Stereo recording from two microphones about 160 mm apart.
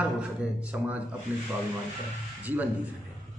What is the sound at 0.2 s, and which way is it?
Speech, 10° right (ahead or behind).